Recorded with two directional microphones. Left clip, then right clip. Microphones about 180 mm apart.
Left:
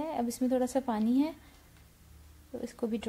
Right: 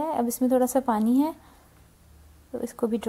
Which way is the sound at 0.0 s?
15° right (ahead or behind).